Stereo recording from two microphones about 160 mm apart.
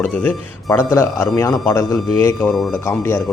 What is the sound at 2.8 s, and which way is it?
Speech, 15° left (ahead or behind).